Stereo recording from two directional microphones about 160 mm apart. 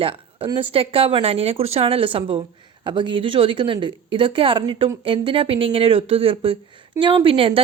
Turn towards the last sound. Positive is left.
turn(degrees=-35)  # may be behind; listen again after turning